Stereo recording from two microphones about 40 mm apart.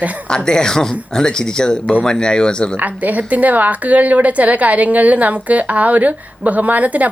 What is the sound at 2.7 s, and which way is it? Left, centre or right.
A woman's voice, right.